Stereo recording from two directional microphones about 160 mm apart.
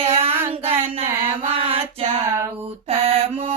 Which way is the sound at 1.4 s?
40° right (ahead or behind).